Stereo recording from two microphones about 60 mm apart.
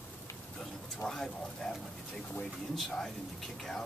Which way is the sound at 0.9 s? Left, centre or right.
Centre.